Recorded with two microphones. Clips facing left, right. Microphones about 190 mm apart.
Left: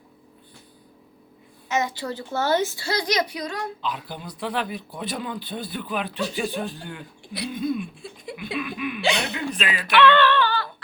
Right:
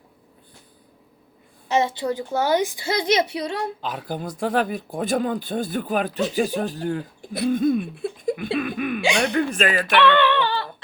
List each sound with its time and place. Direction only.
1.6 s a woman's voice: 30° right (ahead or behind)
3.8 s speech: 45° right (ahead or behind)
9.0 s speech: 10° right (ahead or behind)
9.3 s speech: 45° right (ahead or behind)
10.1 s a sound: 15° right (ahead or behind)